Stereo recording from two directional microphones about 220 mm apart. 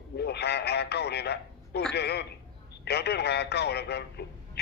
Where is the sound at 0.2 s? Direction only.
50° left (ahead or behind).